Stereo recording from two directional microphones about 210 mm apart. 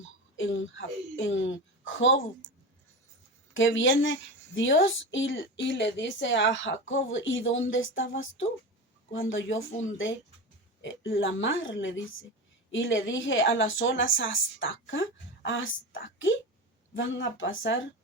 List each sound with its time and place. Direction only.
0.3 s a woman's voice: 65° left (ahead or behind)
3.5 s a woman's voice: 65° left (ahead or behind)
10.8 s a woman's voice: 65° left (ahead or behind)